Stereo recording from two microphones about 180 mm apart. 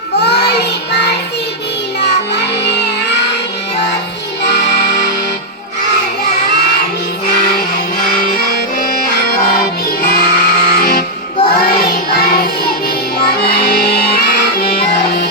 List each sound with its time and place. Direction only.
0.2 s child singing: 65° left (ahead or behind)
2.0 s music: 70° left (ahead or behind)
4.4 s music: 65° left (ahead or behind)
8.2 s music: 55° left (ahead or behind)
11.6 s child singing: 55° left (ahead or behind)
13.4 s music: 60° left (ahead or behind)